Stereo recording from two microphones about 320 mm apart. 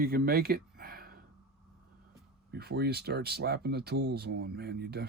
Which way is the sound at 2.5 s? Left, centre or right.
Right.